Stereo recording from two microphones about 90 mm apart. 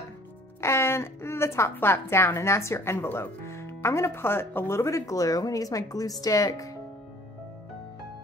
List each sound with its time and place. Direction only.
0.6 s a woman's voice: 30° left (ahead or behind)